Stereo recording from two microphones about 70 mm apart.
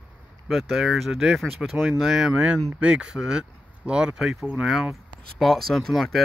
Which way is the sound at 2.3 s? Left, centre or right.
Centre.